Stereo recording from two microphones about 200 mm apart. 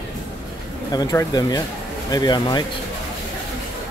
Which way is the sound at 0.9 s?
20° left (ahead or behind).